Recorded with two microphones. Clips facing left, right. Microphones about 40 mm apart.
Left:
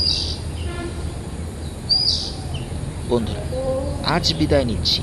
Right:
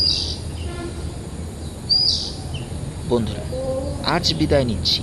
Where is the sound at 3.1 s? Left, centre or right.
Centre.